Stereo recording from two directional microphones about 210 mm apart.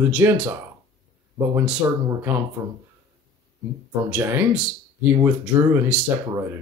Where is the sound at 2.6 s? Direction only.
15° right (ahead or behind).